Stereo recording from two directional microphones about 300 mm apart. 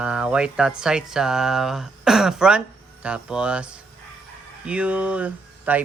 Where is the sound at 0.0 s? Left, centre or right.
Centre.